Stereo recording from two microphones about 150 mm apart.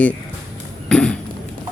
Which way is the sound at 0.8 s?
5° left (ahead or behind).